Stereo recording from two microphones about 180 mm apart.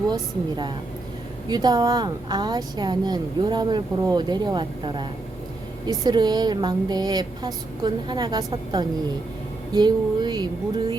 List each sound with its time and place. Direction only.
0.1 s speech: 25° right (ahead or behind)